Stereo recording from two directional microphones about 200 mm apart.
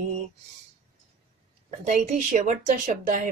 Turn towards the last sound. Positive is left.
turn(degrees=-40)  # may be behind; listen again after turning